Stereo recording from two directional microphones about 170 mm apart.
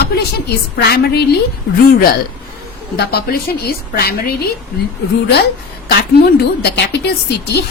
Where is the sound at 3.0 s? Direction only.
65° left (ahead or behind).